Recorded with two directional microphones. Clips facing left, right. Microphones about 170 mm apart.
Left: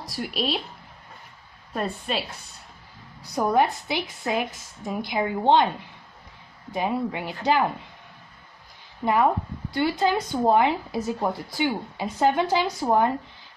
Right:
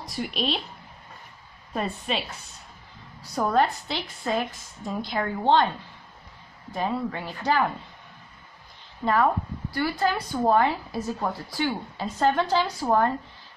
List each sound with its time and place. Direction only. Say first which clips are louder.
0.1 s a woman's voice: left 1 dB; 5° left (ahead or behind)
1.7 s a woman's voice: even; centre (ahead or behind)
3.3 s speech: left 1 dB; 15° left (ahead or behind)
6.7 s speech: left 2 dB; 15° left (ahead or behind)
9.0 s speech: left 1 dB; 20° left (ahead or behind)